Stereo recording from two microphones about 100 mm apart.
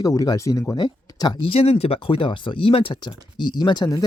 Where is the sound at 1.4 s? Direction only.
75° left (ahead or behind).